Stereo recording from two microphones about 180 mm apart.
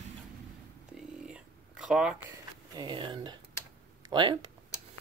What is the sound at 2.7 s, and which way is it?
Speech, 25° right (ahead or behind).